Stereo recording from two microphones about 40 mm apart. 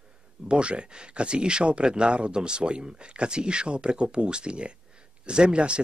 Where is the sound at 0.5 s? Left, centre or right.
Right.